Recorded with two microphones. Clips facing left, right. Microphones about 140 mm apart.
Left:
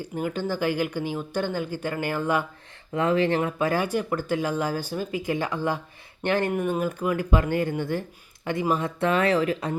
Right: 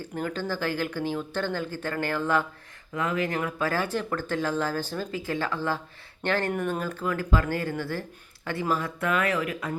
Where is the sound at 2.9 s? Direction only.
30° left (ahead or behind).